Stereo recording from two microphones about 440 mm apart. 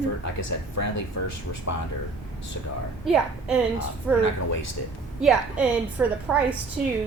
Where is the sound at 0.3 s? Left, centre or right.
Left.